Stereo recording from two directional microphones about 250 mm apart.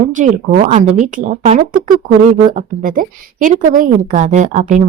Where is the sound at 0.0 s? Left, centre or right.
Right.